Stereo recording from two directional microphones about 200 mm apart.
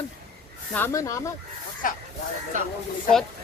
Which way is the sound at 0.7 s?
15° left (ahead or behind).